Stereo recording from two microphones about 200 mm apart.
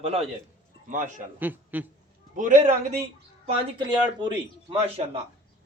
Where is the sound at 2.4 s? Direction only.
40° right (ahead or behind).